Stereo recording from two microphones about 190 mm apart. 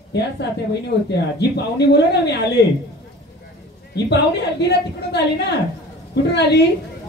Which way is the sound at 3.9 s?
60° left (ahead or behind).